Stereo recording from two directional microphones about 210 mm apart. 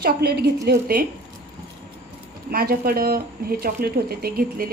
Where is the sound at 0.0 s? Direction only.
50° right (ahead or behind).